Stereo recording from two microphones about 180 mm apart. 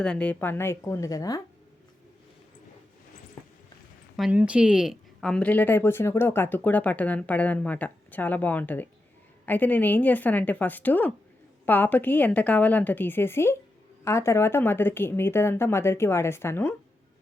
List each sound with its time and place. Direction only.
0.0 s speech: 5° left (ahead or behind)
4.2 s speech: 5° right (ahead or behind); by 16.7 s 15° left (ahead or behind)